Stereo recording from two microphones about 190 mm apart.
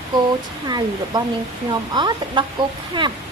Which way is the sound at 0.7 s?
20° right (ahead or behind).